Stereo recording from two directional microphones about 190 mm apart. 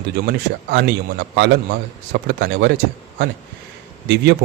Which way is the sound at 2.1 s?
60° right (ahead or behind).